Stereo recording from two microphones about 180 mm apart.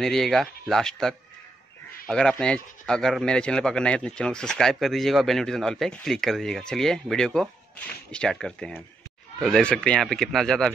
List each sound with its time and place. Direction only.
0.0 s a man's voice: centre (ahead or behind)